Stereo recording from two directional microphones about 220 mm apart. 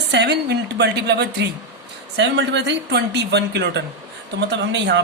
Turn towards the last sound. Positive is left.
turn(degrees=-50)  # may be behind; listen again after turning